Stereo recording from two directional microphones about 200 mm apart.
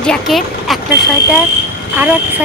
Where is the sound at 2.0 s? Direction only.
10° right (ahead or behind).